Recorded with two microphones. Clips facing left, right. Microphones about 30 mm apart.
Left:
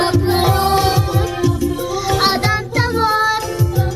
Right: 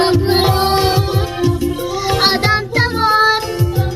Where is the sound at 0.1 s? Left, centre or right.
Right.